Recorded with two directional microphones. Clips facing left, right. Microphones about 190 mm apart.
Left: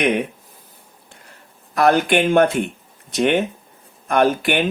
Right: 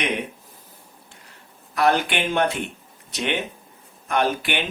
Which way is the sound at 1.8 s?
50° left (ahead or behind).